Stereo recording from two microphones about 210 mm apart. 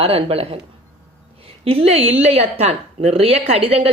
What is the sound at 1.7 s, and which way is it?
Speech, 25° right (ahead or behind).